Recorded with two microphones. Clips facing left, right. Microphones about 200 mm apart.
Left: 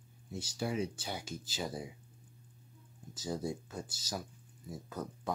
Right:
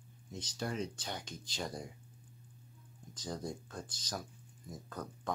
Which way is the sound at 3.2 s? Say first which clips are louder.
Left 4 dB; 5° left (ahead or behind).